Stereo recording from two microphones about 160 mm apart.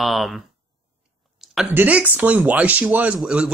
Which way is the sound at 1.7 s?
10° right (ahead or behind).